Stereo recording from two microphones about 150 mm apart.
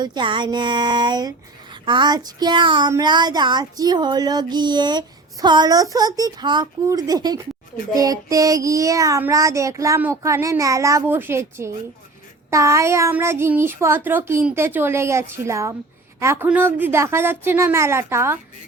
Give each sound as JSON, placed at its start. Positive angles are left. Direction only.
{"t": 0.0, "sound": "child singing", "side_deg": -30}
{"t": 1.7, "sound": "speech", "side_deg": -30}
{"t": 2.9, "sound": "child singing", "side_deg": -30}
{"t": 12.5, "sound": "speech", "side_deg": -20}